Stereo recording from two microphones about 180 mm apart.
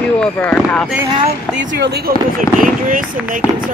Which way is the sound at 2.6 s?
50° right (ahead or behind).